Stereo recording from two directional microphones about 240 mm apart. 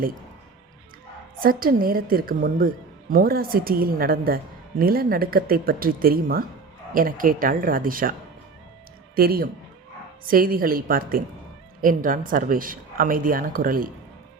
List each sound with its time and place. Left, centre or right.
1.4 s a woman's voice: right
9.1 s a woman's voice: right